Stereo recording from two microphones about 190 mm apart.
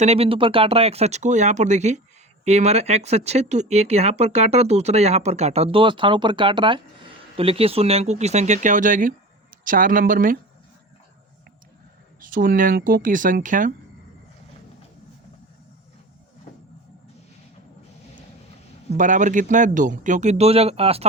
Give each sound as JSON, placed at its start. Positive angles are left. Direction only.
{"t": 0.0, "sound": "speech", "side_deg": -35}
{"t": 12.2, "sound": "speech", "side_deg": -45}
{"t": 18.9, "sound": "speech", "side_deg": -40}